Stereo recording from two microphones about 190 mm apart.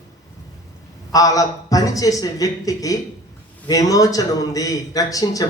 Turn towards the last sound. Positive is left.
turn(degrees=20)  # may be behind; listen again after turning